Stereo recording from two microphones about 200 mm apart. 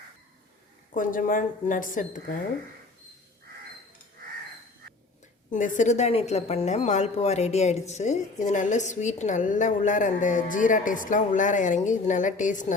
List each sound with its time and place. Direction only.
0.9 s a woman's voice: 45° left (ahead or behind)
5.5 s a woman's voice: 40° left (ahead or behind)